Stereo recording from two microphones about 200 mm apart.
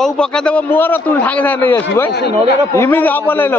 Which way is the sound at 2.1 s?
55° left (ahead or behind).